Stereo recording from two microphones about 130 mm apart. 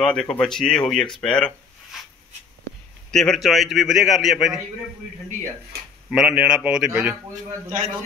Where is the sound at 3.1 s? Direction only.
5° left (ahead or behind).